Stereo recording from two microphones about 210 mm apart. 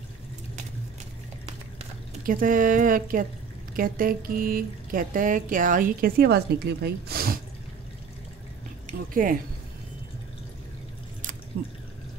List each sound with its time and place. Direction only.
1.8 s speech: 40° right (ahead or behind)
8.8 s a woman's voice: 40° right (ahead or behind)
11.5 s speech: 40° right (ahead or behind)